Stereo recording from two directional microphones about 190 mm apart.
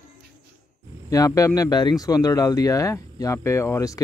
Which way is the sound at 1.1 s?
15° left (ahead or behind).